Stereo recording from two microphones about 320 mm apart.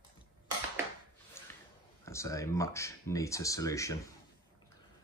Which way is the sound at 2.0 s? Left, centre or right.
Centre.